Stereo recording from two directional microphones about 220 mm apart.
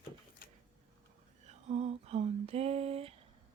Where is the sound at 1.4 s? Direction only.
30° right (ahead or behind).